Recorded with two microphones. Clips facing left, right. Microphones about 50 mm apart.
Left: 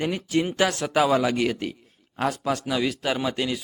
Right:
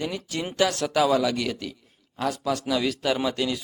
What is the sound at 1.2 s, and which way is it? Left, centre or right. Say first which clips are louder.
Speech: left 3 dB; left.